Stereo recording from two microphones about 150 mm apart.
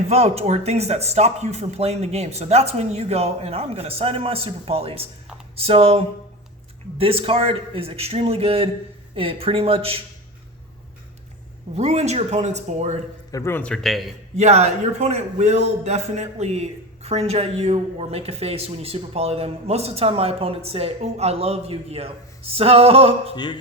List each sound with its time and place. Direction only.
0.1 s a man's voice: 45° right (ahead or behind)
11.7 s speech: 45° right (ahead or behind)
13.3 s a man's voice: 15° left (ahead or behind); by 14.1 s centre (ahead or behind)
14.3 s speech: 45° right (ahead or behind)
23.3 s speech: 30° left (ahead or behind)